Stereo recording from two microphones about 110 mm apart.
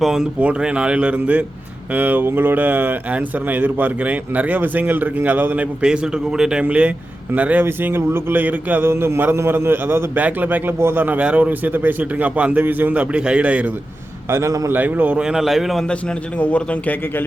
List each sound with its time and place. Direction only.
0.0 s speech: 5° right (ahead or behind)
14.3 s a man's voice: 25° right (ahead or behind)
14.7 s a man's voice: 15° right (ahead or behind); by 17.2 s 15° left (ahead or behind)